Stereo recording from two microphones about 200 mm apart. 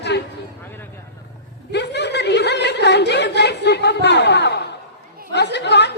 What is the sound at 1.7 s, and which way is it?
Chuckle, 60° left (ahead or behind).